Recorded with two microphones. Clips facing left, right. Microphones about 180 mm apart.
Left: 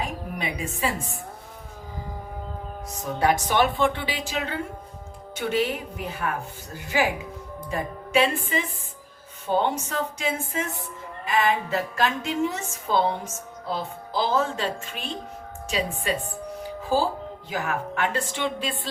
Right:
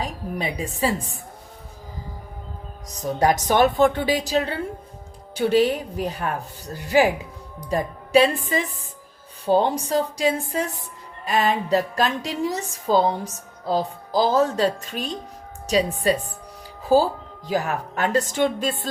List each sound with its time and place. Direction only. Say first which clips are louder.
0.0 s a woman's voice: right 3 dB; 35° right (ahead or behind)
3.0 s a woman's voice: right 3 dB; 40° right (ahead or behind)
7.7 s a woman's voice: right 6 dB; 35° right (ahead or behind)